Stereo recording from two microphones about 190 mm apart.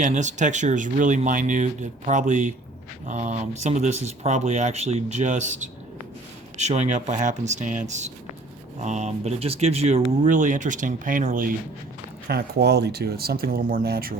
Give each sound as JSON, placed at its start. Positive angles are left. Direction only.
{"t": 0.0, "sound": "speech", "side_deg": -40}
{"t": 12.3, "sound": "speech", "side_deg": -60}